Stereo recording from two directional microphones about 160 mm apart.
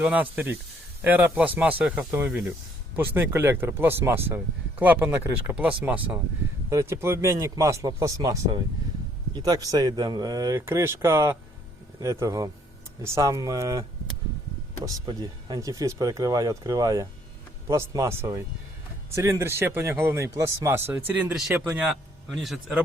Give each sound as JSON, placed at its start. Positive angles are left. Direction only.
{"t": 0.0, "sound": "speech", "side_deg": -10}
{"t": 14.8, "sound": "speech", "side_deg": -25}
{"t": 21.8, "sound": "speech", "side_deg": 0}